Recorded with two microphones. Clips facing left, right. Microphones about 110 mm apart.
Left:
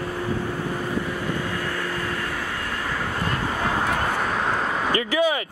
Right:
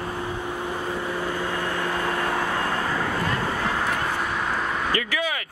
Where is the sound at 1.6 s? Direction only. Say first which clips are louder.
Right 2 dB; 25° right (ahead or behind).